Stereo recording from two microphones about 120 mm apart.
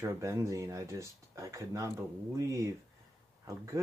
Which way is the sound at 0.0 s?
25° right (ahead or behind).